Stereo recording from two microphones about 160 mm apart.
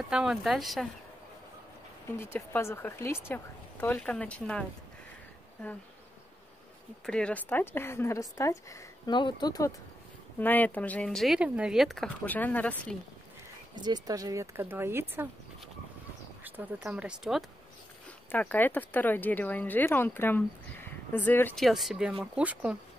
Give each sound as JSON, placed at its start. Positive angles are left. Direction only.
{"t": 0.1, "sound": "speech", "side_deg": -5}
{"t": 2.1, "sound": "speech", "side_deg": 15}
{"t": 7.1, "sound": "a woman's voice", "side_deg": 5}
{"t": 10.4, "sound": "speech", "side_deg": 10}
{"t": 13.7, "sound": "speech", "side_deg": -25}
{"t": 16.4, "sound": "speech", "side_deg": -10}
{"t": 18.3, "sound": "speech", "side_deg": 10}
{"t": 21.5, "sound": "speech", "side_deg": 0}